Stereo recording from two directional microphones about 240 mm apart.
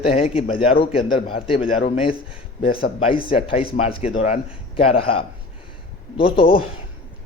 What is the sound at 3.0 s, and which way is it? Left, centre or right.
A man's voice, left.